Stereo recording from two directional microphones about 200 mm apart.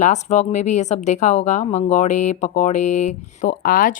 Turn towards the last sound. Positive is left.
turn(degrees=45)  # may be behind; listen again after turning